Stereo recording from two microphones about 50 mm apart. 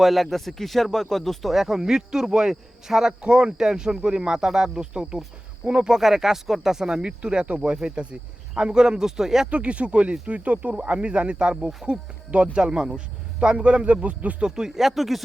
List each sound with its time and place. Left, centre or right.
0.0 s a man's voice: centre
9.5 s speech: right
14.4 s a man's voice: centre
14.8 s speech: centre